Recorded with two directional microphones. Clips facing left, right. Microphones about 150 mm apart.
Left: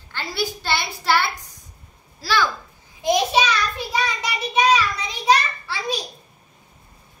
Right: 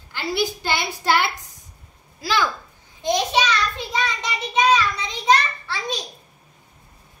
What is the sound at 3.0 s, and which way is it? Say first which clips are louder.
Child singing: left 2 dB; 10° left (ahead or behind).